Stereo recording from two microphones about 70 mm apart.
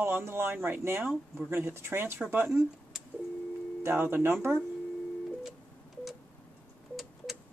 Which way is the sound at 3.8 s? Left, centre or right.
Right.